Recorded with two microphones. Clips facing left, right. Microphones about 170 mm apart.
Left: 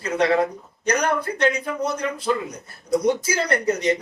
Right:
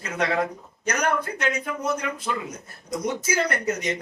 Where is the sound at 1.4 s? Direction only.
35° left (ahead or behind).